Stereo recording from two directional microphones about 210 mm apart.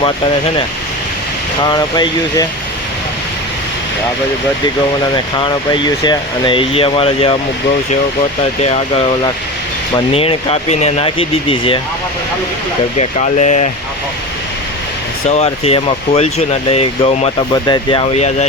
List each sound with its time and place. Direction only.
1.7 s speech: 20° left (ahead or behind)
5.1 s speech: 20° left (ahead or behind)
10.2 s speech: 30° left (ahead or behind)
13.0 s speech: 35° left (ahead or behind)
15.3 s speech: 30° left (ahead or behind)